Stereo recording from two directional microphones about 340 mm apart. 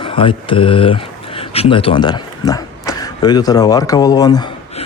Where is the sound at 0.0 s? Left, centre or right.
Centre.